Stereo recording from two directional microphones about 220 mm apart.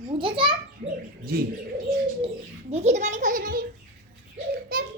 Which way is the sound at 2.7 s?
30° right (ahead or behind).